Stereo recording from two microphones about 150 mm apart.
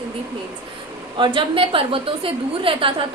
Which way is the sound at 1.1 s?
35° right (ahead or behind).